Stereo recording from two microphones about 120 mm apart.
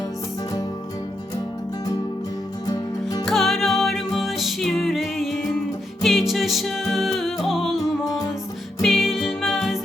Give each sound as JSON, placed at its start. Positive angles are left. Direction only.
{"t": 2.6, "sound": "music", "side_deg": 30}
{"t": 3.2, "sound": "music", "side_deg": 0}
{"t": 8.8, "sound": "music", "side_deg": 0}